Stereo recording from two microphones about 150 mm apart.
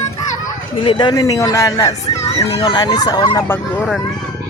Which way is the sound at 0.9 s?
30° left (ahead or behind).